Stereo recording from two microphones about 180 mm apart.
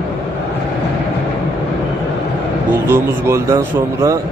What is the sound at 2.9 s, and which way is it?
Speech, 15° right (ahead or behind).